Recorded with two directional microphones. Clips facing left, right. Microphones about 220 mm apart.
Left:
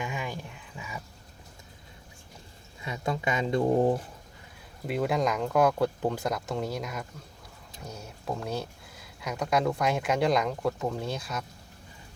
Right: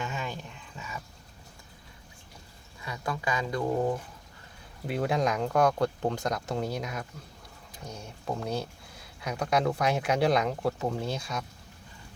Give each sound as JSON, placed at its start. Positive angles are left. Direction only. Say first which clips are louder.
{"t": 0.0, "sound": "a sound", "louder": "left 1 dB", "side_deg": 10}
{"t": 2.8, "sound": "speech", "louder": "left 3 dB", "side_deg": 20}
{"t": 4.9, "sound": "speech", "louder": "left 1 dB", "side_deg": 0}